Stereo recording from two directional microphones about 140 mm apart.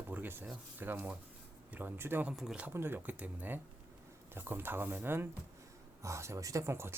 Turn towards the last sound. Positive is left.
turn(degrees=-20)  # may be behind; listen again after turning